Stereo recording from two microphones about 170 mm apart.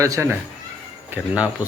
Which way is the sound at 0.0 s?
15° right (ahead or behind).